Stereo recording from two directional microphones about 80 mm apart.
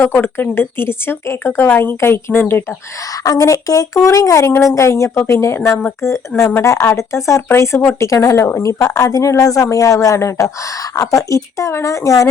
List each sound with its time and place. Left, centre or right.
0.0 s a woman's voice: left
3.2 s a woman's voice: left